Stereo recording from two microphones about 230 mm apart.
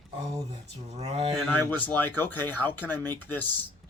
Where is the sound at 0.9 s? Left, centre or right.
Right.